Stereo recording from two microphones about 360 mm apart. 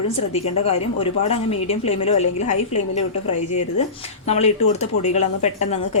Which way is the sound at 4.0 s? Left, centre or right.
Centre.